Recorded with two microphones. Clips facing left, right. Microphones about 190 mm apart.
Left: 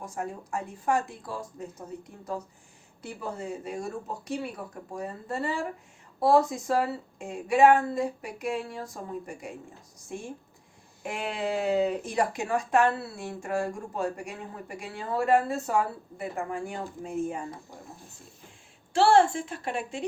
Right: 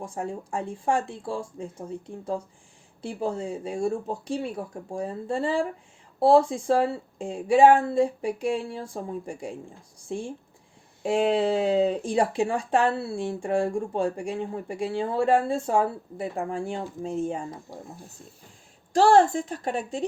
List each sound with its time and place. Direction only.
0.0 s a woman's voice: 30° right (ahead or behind)
18.9 s a woman's voice: 40° right (ahead or behind)